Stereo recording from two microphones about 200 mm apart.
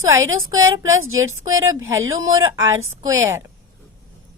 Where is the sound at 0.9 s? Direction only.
90° right.